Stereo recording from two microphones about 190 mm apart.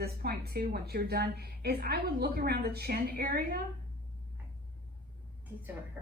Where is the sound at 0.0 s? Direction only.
55° right (ahead or behind).